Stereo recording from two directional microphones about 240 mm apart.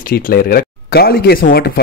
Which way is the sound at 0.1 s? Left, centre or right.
Left.